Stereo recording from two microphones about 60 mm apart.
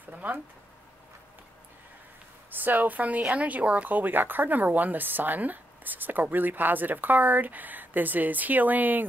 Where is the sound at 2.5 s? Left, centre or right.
Right.